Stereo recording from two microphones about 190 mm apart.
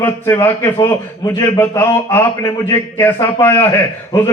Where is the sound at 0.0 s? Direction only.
10° left (ahead or behind).